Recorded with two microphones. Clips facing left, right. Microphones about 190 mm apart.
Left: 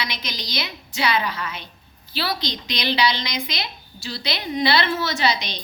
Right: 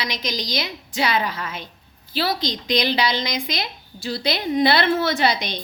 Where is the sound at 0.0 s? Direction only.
40° right (ahead or behind).